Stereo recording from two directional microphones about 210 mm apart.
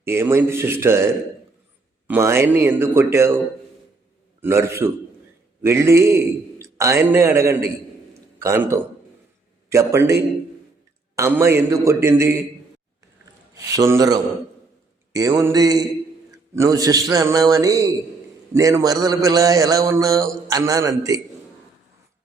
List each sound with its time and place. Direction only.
0.0 s mantra: 10° right (ahead or behind)
4.4 s a man's voice: 10° right (ahead or behind)
5.6 s mantra: 15° right (ahead or behind)
8.4 s a man's voice: 15° right (ahead or behind)
11.2 s mantra: 15° right (ahead or behind)
13.5 s mantra: 15° right (ahead or behind)